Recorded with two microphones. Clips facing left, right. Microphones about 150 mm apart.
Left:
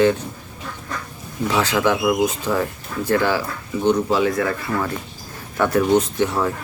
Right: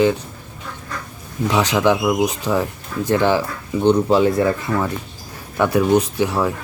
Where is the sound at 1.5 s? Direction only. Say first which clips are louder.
Right 2 dB; 15° right (ahead or behind).